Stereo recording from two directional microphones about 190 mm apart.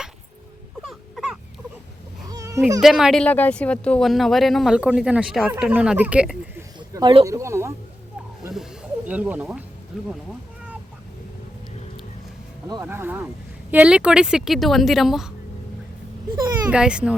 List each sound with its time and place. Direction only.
0.8 s baby cry: centre (ahead or behind)
2.3 s a sound: 15° right (ahead or behind)
2.8 s speech: centre (ahead or behind)
6.7 s a sound: 25° right (ahead or behind)
7.3 s speech: 15° right (ahead or behind)
9.0 s speech: 10° right (ahead or behind)
12.6 s speech: 15° right (ahead or behind); by 15.3 s centre (ahead or behind)
16.6 s speech: 5° right (ahead or behind)